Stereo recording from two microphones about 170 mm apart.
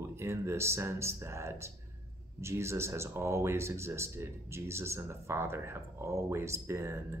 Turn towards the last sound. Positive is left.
turn(degrees=-15)  # may be behind; listen again after turning